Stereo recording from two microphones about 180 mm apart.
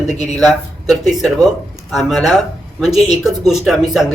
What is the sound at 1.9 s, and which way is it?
Speech, centre (ahead or behind).